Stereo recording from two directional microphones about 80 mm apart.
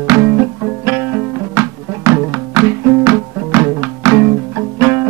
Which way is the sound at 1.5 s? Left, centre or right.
Right.